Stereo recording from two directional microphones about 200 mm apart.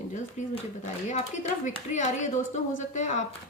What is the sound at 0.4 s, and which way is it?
A woman's voice, 35° left (ahead or behind).